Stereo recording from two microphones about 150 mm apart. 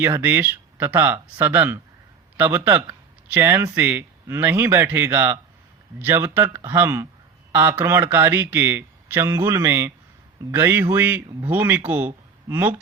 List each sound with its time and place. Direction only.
0.0 s speech: 15° right (ahead or behind)